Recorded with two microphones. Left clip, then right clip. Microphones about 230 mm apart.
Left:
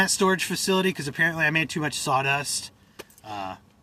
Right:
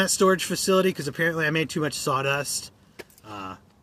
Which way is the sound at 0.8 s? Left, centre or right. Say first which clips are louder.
Left 1 dB; centre.